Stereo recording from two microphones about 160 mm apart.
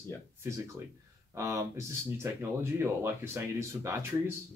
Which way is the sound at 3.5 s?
20° right (ahead or behind).